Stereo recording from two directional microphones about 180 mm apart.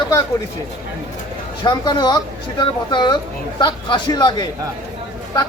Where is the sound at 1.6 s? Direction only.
25° left (ahead or behind).